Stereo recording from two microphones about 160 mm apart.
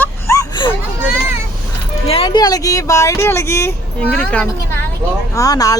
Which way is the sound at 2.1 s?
35° left (ahead or behind).